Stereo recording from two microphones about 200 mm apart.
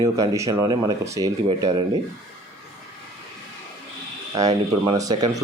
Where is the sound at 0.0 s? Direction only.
15° right (ahead or behind).